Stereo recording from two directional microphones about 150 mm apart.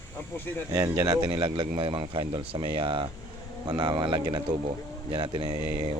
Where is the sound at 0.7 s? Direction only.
20° right (ahead or behind).